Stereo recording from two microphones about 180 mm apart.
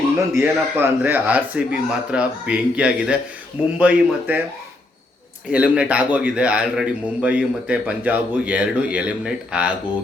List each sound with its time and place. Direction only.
0.3 s a man's voice: 15° right (ahead or behind)
5.5 s a man's voice: 5° right (ahead or behind)